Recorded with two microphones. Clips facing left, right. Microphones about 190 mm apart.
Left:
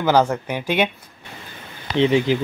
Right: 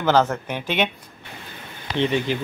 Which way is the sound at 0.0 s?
10° left (ahead or behind).